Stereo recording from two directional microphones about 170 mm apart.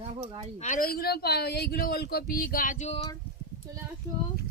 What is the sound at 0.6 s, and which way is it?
Speech, 55° left (ahead or behind).